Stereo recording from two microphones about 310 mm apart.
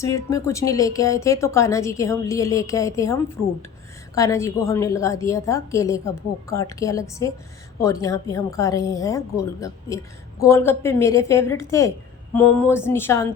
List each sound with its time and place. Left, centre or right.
0.0 s a woman's voice: centre